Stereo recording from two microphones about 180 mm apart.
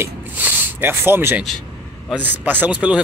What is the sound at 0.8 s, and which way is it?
Speech, 10° right (ahead or behind).